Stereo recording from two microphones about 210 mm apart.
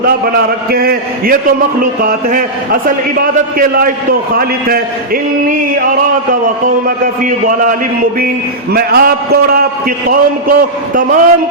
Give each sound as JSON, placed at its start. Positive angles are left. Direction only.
{"t": 0.7, "sound": "a man's voice", "side_deg": -45}
{"t": 3.6, "sound": "a man's voice", "side_deg": -40}
{"t": 6.8, "sound": "a man's voice", "side_deg": -40}
{"t": 8.7, "sound": "a man's voice", "side_deg": -45}